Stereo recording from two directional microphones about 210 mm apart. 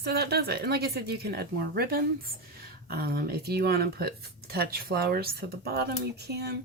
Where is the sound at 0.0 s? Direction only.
50° right (ahead or behind).